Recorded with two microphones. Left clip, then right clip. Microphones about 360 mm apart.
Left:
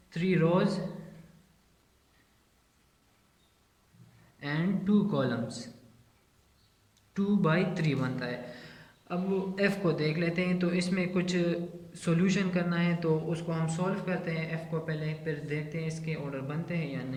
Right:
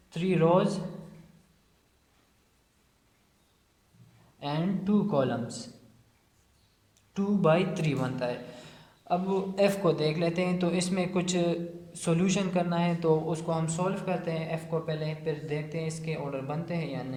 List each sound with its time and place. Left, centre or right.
0.1 s speech: centre
4.4 s a man's voice: centre
7.1 s a man's voice: centre